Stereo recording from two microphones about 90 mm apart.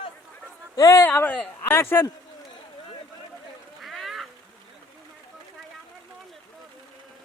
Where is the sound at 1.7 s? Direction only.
25° left (ahead or behind).